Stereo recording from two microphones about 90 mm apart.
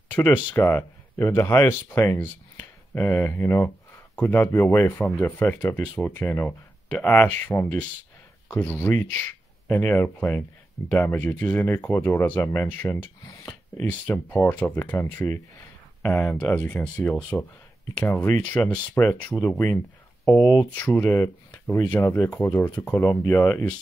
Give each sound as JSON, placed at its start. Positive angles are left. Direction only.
{"t": 0.1, "sound": "speech", "side_deg": 20}
{"t": 7.4, "sound": "speech", "side_deg": 30}
{"t": 17.9, "sound": "speech", "side_deg": 20}
{"t": 20.7, "sound": "speech", "side_deg": 20}